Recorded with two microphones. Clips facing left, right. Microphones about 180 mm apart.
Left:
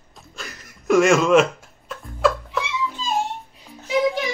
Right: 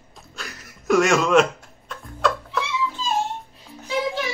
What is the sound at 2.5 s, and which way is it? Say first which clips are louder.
Music: even; 15° left (ahead or behind).